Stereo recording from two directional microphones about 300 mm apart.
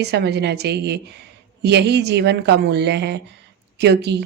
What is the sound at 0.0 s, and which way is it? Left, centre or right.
Speech, right.